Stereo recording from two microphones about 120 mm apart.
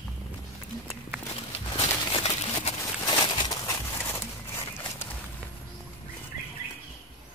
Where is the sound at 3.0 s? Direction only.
40° left (ahead or behind).